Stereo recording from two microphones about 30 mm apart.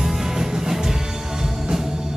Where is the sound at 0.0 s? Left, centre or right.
Centre.